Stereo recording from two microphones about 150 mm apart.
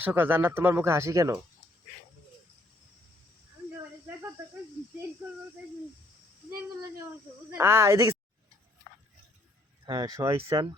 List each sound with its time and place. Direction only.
0.0 s speech: 15° right (ahead or behind)
7.5 s speech: 15° right (ahead or behind)
9.8 s speech: 30° right (ahead or behind)